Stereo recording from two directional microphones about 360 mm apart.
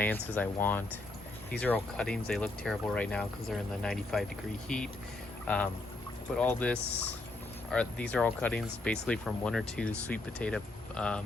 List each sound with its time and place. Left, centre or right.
0.0 s speech: centre